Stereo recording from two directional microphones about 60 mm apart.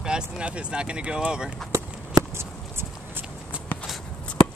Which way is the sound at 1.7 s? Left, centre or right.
Right.